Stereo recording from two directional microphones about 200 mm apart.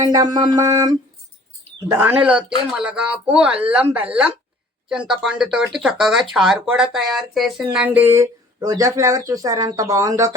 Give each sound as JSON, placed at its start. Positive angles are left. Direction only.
{"t": 0.0, "sound": "speech", "side_deg": -20}